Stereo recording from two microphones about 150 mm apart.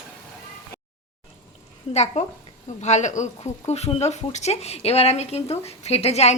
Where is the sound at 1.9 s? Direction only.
50° left (ahead or behind).